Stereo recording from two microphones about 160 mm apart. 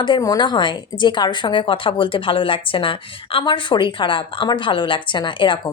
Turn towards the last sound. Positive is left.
turn(degrees=30)  # may be behind; listen again after turning